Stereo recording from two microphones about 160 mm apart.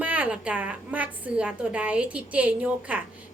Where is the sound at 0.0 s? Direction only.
10° right (ahead or behind).